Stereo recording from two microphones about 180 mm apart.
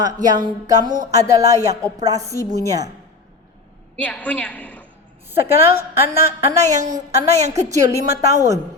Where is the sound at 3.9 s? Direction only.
10° left (ahead or behind).